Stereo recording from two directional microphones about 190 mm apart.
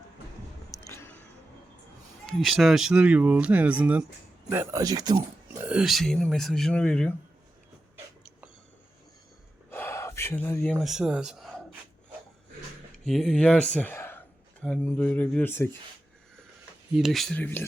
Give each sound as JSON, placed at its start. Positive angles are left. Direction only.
{"t": 0.7, "sound": "a sound", "side_deg": 15}
{"t": 2.2, "sound": "speech", "side_deg": 0}
{"t": 5.6, "sound": "speech", "side_deg": -5}
{"t": 9.6, "sound": "speech", "side_deg": 10}
{"t": 13.1, "sound": "speech", "side_deg": 5}
{"t": 16.9, "sound": "speech", "side_deg": 0}